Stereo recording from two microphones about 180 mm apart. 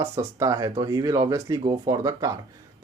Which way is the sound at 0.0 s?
15° right (ahead or behind).